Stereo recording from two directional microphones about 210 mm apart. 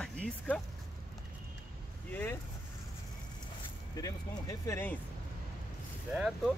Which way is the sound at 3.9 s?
15° left (ahead or behind).